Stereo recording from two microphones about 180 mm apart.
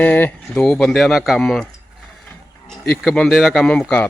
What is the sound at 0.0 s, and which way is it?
Speech, 10° left (ahead or behind).